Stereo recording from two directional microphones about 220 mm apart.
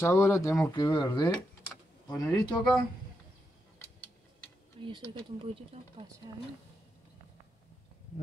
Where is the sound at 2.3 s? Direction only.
20° left (ahead or behind).